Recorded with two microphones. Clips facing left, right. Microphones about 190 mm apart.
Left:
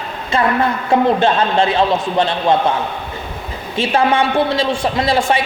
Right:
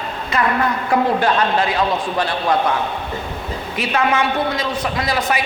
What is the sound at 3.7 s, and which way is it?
A woman's voice, 30° left (ahead or behind).